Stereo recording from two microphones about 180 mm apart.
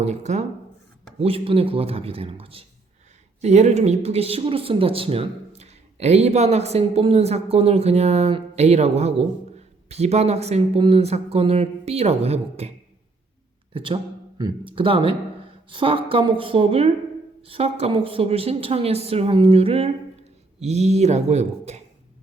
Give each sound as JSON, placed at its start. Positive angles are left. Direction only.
{"t": 0.0, "sound": "speech", "side_deg": -40}
{"t": 13.7, "sound": "speech", "side_deg": -30}